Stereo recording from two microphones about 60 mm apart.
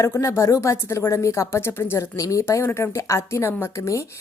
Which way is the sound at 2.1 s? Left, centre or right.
Left.